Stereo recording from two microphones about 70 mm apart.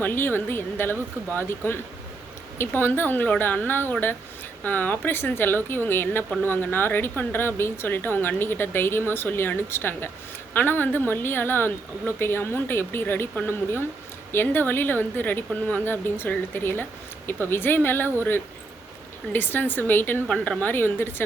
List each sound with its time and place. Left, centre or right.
0.0 s a woman's voice: left
20.2 s a woman's voice: centre
20.6 s speech: left